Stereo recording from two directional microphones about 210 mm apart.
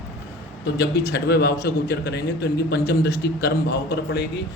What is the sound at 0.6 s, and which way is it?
A man's voice, 55° left (ahead or behind).